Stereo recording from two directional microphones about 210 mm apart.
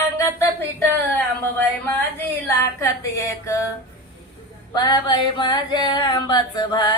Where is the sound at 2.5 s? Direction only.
15° left (ahead or behind).